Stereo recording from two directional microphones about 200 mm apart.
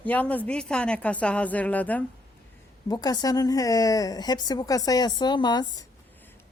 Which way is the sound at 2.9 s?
20° left (ahead or behind).